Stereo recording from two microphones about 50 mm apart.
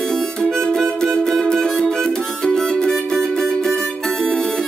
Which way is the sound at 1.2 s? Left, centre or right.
Centre.